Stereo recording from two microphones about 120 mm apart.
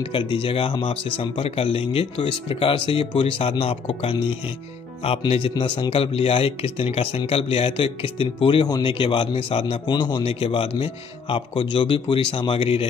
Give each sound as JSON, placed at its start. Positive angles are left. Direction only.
{"t": 0.0, "sound": "speech", "side_deg": 45}
{"t": 5.5, "sound": "a man's voice", "side_deg": 35}
{"t": 5.9, "sound": "speech", "side_deg": 50}
{"t": 8.6, "sound": "a man's voice", "side_deg": 35}
{"t": 8.9, "sound": "speech", "side_deg": 45}
{"t": 10.2, "sound": "speech", "side_deg": 50}